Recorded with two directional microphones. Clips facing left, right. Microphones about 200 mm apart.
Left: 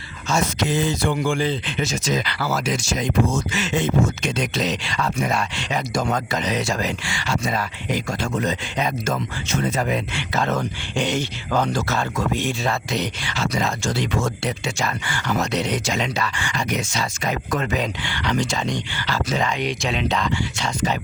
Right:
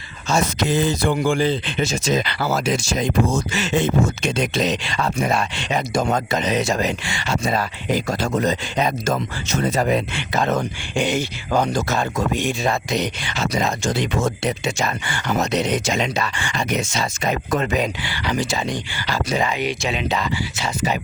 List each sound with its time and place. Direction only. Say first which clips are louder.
0.3 s speech: right 2 dB; 35° right (ahead or behind)
10.2 s speech: right 2 dB; 15° right (ahead or behind)
18.0 s speech: even; 5° right (ahead or behind)